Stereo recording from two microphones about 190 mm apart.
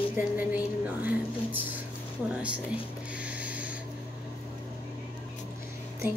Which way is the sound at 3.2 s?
5° right (ahead or behind).